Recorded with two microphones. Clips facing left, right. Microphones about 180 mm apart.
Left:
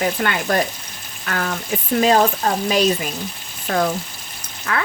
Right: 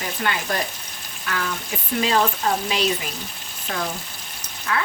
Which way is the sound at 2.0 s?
45° left (ahead or behind).